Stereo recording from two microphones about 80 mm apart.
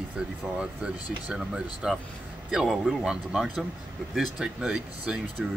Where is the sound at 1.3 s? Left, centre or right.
Centre.